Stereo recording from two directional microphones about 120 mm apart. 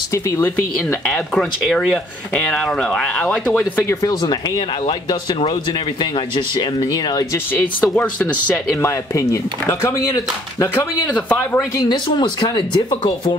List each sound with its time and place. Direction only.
0.1 s speech: 20° left (ahead or behind)
1.0 s speech: 5° left (ahead or behind)
4.0 s speech: 30° left (ahead or behind)
6.3 s speech: 40° left (ahead or behind)
7.5 s speech: 10° left (ahead or behind)
8.8 s speech: 25° left (ahead or behind)
11.2 s speech: 15° left (ahead or behind)
11.9 s speech: 40° left (ahead or behind)